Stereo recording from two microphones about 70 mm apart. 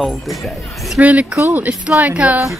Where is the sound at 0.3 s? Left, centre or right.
Centre.